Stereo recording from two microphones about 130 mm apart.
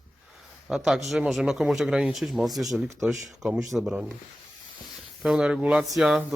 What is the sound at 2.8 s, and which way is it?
Speech, 25° right (ahead or behind).